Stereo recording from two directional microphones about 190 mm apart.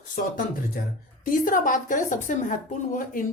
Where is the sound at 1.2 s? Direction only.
45° left (ahead or behind).